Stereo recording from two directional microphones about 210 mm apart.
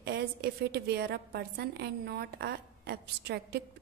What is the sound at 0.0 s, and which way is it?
A woman's voice, 50° right (ahead or behind).